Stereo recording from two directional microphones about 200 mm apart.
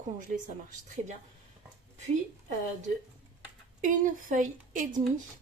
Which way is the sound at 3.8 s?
40° right (ahead or behind).